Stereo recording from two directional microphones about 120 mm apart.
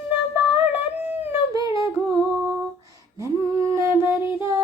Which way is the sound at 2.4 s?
15° right (ahead or behind).